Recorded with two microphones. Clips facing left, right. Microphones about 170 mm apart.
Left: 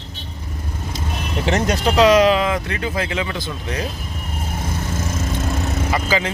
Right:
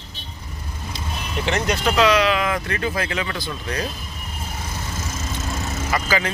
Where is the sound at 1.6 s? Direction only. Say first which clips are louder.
Left 4 dB; 35° left (ahead or behind).